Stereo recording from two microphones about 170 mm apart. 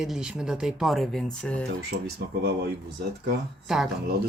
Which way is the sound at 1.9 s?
65° right (ahead or behind).